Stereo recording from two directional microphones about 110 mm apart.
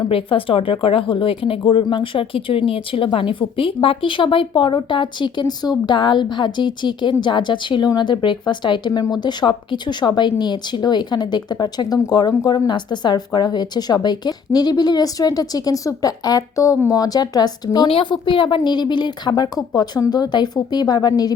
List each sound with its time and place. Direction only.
0.1 s speech: 55° left (ahead or behind); by 17.8 s 35° left (ahead or behind)
17.8 s speech: 50° left (ahead or behind); by 21.3 s 35° left (ahead or behind)